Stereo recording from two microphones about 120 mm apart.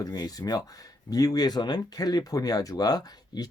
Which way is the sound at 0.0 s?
35° left (ahead or behind).